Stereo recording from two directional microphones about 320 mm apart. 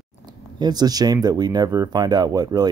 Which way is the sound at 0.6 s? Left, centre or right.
Centre.